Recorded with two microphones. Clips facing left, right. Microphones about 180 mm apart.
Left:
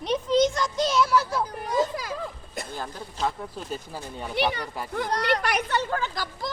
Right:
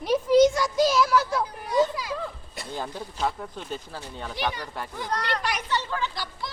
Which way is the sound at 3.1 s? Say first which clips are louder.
Left 1 dB; centre (ahead or behind).